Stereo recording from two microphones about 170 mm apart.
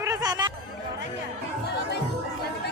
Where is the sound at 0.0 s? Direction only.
20° right (ahead or behind).